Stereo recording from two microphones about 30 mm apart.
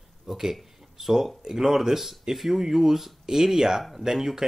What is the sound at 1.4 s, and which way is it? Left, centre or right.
Speech, centre.